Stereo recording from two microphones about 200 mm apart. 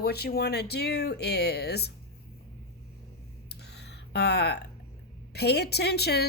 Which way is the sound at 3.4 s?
55° left (ahead or behind).